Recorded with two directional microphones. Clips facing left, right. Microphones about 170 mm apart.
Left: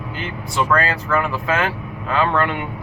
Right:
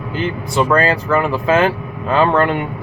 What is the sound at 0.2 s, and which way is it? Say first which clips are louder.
Speech: right 6 dB; 30° right (ahead or behind).